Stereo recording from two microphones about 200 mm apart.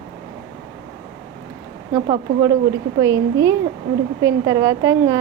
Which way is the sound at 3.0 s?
15° right (ahead or behind).